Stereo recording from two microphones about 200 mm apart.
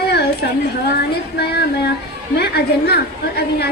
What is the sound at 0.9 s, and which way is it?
A woman's voice, 55° left (ahead or behind).